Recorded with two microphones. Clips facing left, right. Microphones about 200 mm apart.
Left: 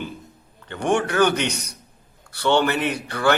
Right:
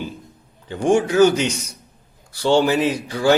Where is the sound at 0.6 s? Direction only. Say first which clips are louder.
Right 4 dB; 65° left (ahead or behind).